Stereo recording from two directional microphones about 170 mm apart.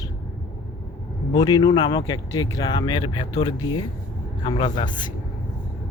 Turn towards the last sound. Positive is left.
turn(degrees=25)  # may be behind; listen again after turning